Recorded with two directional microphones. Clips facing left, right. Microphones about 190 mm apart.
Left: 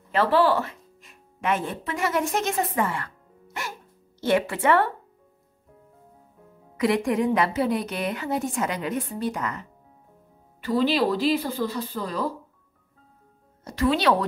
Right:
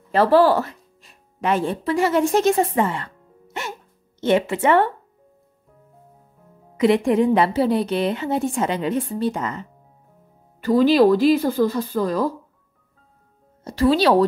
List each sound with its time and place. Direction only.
0.1 s speech: 40° right (ahead or behind); by 3.1 s 25° right (ahead or behind)
4.2 s a woman's voice: 20° right (ahead or behind)
6.8 s a woman's voice: 25° right (ahead or behind)
10.6 s speech: 45° right (ahead or behind)
13.7 s speech: 35° right (ahead or behind)